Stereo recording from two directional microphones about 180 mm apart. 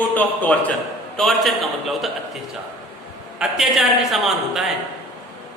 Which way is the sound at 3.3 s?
Centre (ahead or behind).